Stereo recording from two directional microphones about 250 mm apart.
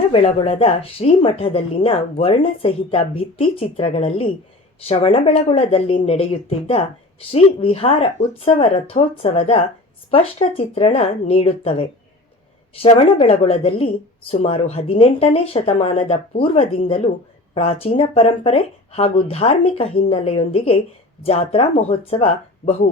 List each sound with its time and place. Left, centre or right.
0.1 s a woman's voice: left